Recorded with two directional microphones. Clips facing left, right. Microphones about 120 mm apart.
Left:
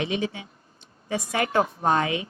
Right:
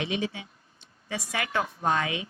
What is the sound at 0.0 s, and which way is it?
Speech, 40° left (ahead or behind).